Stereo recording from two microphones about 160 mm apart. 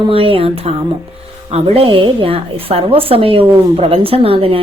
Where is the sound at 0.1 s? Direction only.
35° right (ahead or behind).